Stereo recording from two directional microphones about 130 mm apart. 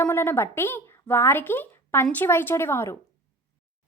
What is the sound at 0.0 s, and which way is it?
Speech, 20° left (ahead or behind).